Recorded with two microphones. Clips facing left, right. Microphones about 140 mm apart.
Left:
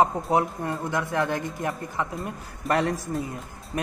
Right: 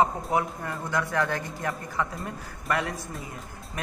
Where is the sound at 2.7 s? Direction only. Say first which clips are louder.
Left 5 dB; 35° left (ahead or behind).